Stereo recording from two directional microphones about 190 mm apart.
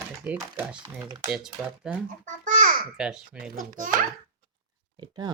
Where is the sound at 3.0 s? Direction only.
5° right (ahead or behind).